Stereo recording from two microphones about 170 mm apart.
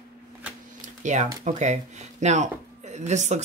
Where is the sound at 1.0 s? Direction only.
45° right (ahead or behind).